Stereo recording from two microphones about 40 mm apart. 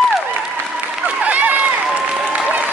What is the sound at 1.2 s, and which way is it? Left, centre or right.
Run, right.